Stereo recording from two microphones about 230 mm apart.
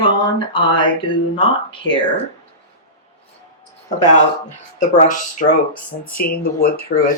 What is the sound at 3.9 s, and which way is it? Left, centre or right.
Speech, left.